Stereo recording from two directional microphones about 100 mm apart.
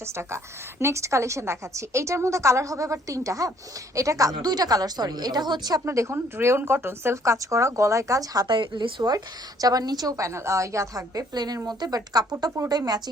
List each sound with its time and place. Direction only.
0.8 s a woman's voice: 25° right (ahead or behind); by 5.8 s 45° right (ahead or behind)
5.8 s a woman's voice: 30° right (ahead or behind)